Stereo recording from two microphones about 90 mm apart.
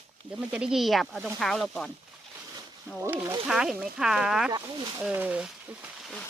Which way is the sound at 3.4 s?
5° right (ahead or behind).